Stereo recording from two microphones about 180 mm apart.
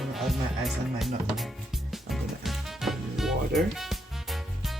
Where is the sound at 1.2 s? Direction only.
Centre (ahead or behind).